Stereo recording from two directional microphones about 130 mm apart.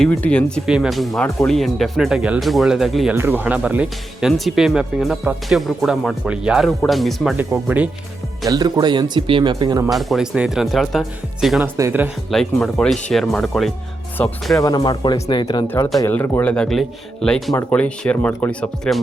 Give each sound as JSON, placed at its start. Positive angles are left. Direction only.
{"t": 0.0, "sound": "speech", "side_deg": 10}
{"t": 0.6, "sound": "speech", "side_deg": 0}
{"t": 3.2, "sound": "speech", "side_deg": -15}
{"t": 7.3, "sound": "speech", "side_deg": -15}
{"t": 8.4, "sound": "speech", "side_deg": -30}
{"t": 9.9, "sound": "speech", "side_deg": 0}
{"t": 11.6, "sound": "speech", "side_deg": -15}
{"t": 12.3, "sound": "speech", "side_deg": 0}
{"t": 14.6, "sound": "speech", "side_deg": 30}
{"t": 16.1, "sound": "speech", "side_deg": 15}